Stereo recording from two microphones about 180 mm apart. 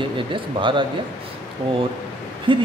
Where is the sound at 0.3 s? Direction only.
25° right (ahead or behind).